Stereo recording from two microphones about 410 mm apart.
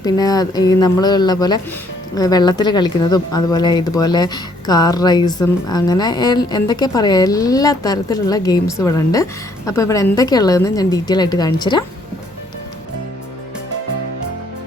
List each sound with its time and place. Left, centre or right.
0.0 s speech: centre